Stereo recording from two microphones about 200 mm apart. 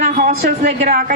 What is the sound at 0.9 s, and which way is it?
Speech, 45° right (ahead or behind).